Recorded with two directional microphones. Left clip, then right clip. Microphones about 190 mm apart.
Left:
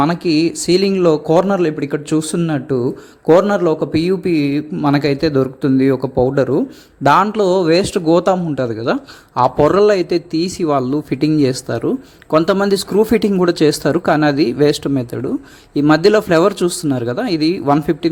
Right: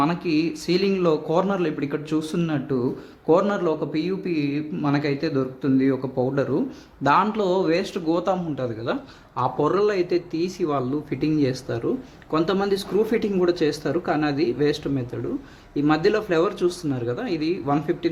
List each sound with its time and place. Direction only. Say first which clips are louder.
0.0 s a man's voice: left 8 dB; 35° left (ahead or behind)